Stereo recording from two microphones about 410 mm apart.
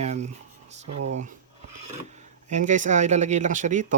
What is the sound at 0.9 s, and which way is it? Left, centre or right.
Speech, right.